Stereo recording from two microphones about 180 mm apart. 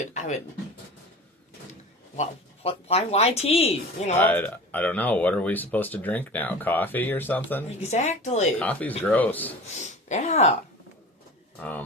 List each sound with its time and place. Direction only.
0.0 s speech: 40° left (ahead or behind)
2.6 s speech: 35° left (ahead or behind)
4.1 s speech: 10° left (ahead or behind)
7.8 s speech: 40° left (ahead or behind)
8.5 s speech: 10° left (ahead or behind)
9.8 s speech: 40° left (ahead or behind)
11.6 s speech: 10° left (ahead or behind)